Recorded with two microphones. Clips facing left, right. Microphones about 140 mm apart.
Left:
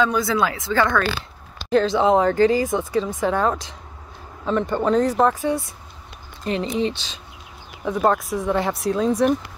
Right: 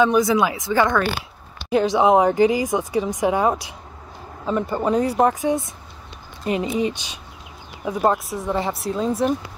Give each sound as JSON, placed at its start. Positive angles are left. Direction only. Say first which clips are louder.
{"t": 0.0, "sound": "speech", "louder": "right 3 dB", "side_deg": -15}